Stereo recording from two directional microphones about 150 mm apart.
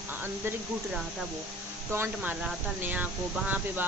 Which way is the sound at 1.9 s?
15° right (ahead or behind).